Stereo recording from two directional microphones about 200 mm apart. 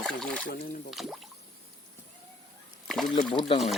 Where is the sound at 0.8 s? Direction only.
Centre (ahead or behind).